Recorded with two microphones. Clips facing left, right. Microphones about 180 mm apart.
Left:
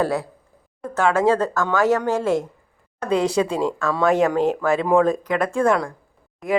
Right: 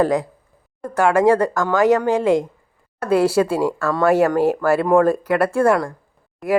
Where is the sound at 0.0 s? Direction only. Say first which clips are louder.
Right 4 dB; 15° right (ahead or behind).